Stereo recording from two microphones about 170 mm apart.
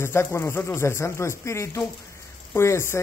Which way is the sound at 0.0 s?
15° left (ahead or behind).